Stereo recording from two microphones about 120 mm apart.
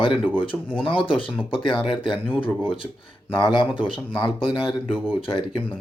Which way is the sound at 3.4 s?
40° left (ahead or behind).